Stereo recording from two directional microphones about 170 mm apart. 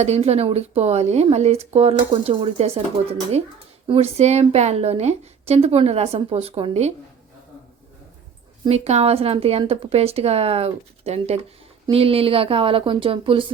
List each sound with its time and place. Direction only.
0.0 s speech: 40° right (ahead or behind)
8.7 s speech: 40° right (ahead or behind)